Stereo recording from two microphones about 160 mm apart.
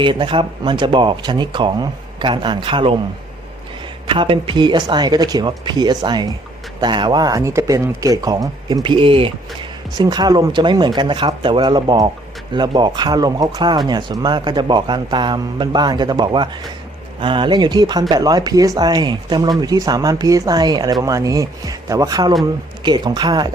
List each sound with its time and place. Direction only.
0.0 s speech: 30° right (ahead or behind)
4.0 s speech: 35° right (ahead or behind)